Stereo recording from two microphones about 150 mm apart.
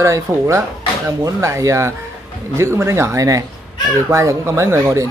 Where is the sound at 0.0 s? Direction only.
20° right (ahead or behind).